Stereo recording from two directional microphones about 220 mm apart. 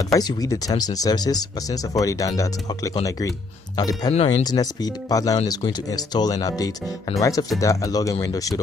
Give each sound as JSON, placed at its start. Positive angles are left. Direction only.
{"t": 0.1, "sound": "speech", "side_deg": 15}